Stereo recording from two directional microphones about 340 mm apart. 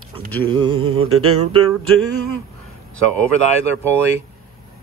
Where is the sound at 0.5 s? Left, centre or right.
Centre.